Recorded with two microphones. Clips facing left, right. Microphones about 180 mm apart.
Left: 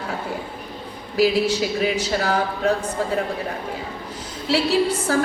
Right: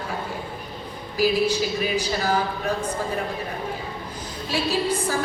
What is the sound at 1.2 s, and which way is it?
A woman's voice, 70° left (ahead or behind).